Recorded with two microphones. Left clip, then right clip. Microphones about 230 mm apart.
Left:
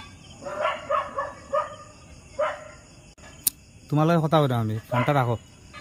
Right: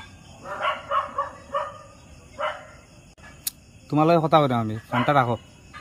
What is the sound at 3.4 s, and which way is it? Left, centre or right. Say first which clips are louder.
Speech: left 3 dB; left.